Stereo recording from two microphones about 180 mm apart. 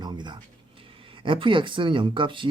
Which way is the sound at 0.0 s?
25° right (ahead or behind).